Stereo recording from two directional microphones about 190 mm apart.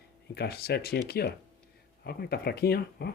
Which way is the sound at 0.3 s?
55° left (ahead or behind).